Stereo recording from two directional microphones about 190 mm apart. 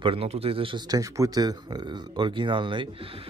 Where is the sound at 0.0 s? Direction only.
30° right (ahead or behind).